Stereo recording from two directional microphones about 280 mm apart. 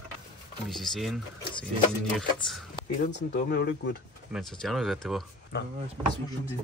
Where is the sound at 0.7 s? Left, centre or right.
Centre.